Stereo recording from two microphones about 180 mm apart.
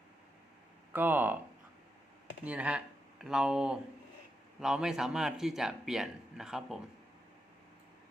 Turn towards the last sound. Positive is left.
turn(degrees=0)  # may be behind; listen again after turning